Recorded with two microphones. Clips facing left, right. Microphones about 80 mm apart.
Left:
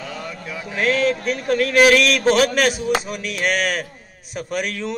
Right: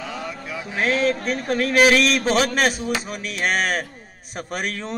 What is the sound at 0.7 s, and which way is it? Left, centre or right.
A man's voice, right.